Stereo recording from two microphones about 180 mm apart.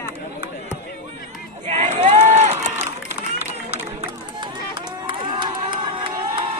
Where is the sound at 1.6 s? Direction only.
40° right (ahead or behind).